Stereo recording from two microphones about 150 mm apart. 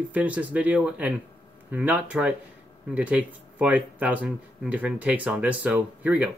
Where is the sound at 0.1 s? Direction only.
10° right (ahead or behind).